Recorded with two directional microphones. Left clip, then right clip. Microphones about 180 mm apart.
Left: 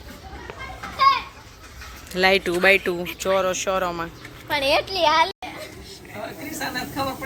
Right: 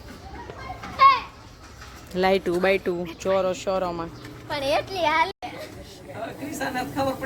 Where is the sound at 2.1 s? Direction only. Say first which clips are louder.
Left 3 dB; 15° right (ahead or behind).